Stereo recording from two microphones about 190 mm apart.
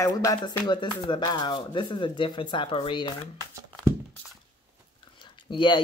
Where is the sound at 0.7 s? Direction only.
25° left (ahead or behind).